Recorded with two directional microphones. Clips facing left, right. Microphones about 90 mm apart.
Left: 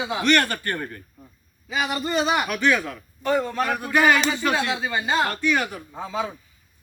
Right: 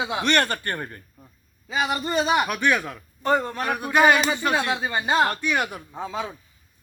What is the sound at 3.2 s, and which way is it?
Speech, 35° right (ahead or behind).